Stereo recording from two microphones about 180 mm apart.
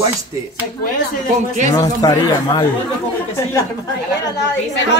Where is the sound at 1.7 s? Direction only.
20° left (ahead or behind).